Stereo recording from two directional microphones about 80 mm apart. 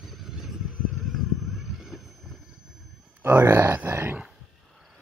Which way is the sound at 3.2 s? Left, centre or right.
Right.